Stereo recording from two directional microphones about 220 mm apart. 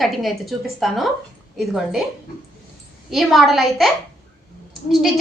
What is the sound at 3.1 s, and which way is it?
Speech, centre (ahead or behind).